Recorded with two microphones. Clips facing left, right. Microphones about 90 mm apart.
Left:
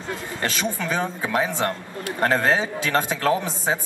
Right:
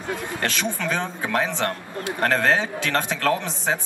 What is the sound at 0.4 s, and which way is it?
A man's voice, 5° left (ahead or behind).